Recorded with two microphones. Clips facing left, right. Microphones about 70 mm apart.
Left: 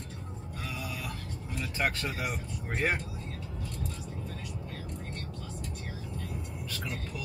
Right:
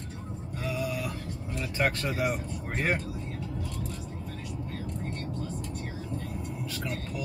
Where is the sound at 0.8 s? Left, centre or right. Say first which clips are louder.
Right 8 dB; centre.